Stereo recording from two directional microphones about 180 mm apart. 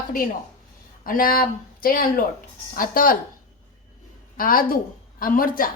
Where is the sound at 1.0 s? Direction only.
50° left (ahead or behind).